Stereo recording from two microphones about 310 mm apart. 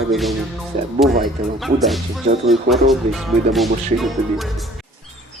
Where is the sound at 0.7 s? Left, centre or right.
Right.